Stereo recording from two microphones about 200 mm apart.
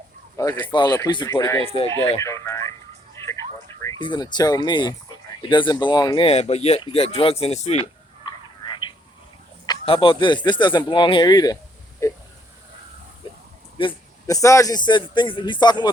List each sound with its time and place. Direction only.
0.3 s speech: 15° left (ahead or behind)
1.6 s speech: 30° left (ahead or behind)
2.1 s speech: 15° left (ahead or behind)
4.0 s speech: 20° left (ahead or behind)
8.2 s a sound: 25° left (ahead or behind)
9.6 s speech: 25° left (ahead or behind)
13.7 s speech: 20° left (ahead or behind)